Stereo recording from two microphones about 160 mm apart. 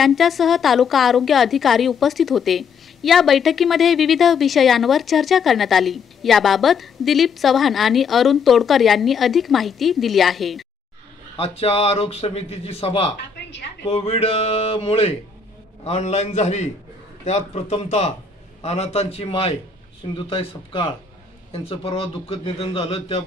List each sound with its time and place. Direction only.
0.0 s a woman's voice: centre (ahead or behind)
11.3 s a man's voice: 40° left (ahead or behind)